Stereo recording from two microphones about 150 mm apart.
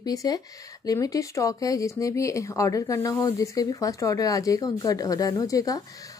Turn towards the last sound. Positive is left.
turn(degrees=25)  # may be behind; listen again after turning